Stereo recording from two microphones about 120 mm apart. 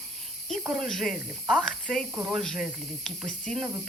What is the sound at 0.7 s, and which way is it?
Speech, centre (ahead or behind).